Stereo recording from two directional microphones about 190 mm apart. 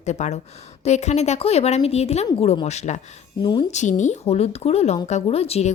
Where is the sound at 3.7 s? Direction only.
40° left (ahead or behind).